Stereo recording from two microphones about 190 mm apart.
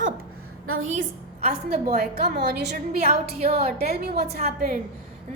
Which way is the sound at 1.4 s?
50° right (ahead or behind).